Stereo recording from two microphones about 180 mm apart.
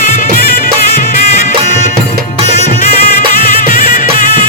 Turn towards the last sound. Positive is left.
turn(degrees=50)  # may be behind; listen again after turning